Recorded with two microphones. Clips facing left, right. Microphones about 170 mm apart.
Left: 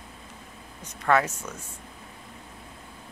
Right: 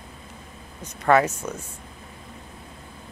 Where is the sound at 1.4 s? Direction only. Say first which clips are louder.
Right 7 dB; 25° right (ahead or behind).